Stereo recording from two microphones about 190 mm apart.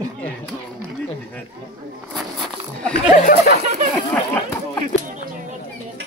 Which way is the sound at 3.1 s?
45° left (ahead or behind).